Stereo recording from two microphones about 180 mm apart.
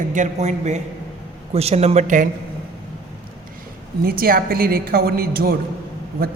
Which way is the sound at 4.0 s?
55° right (ahead or behind).